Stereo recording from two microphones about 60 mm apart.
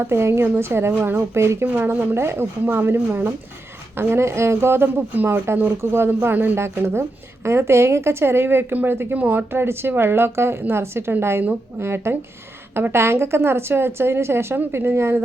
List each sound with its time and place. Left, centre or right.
0.0 s a woman's voice: right
1.6 s a woman's voice: right
5.1 s speech: right
5.8 s a woman's voice: right
6.2 s a woman's voice: right
7.4 s a woman's voice: right
9.5 s a woman's voice: right